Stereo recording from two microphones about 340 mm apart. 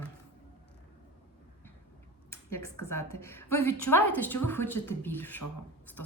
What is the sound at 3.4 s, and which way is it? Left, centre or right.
Speech, left.